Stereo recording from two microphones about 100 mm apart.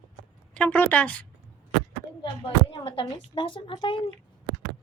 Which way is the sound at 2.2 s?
60° left (ahead or behind).